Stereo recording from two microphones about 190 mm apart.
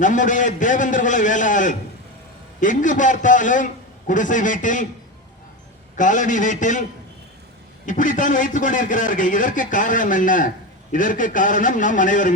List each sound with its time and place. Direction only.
0.0 s a man's voice: 40° left (ahead or behind)
6.0 s a man's voice: 40° left (ahead or behind)
7.9 s a man's voice: 45° left (ahead or behind)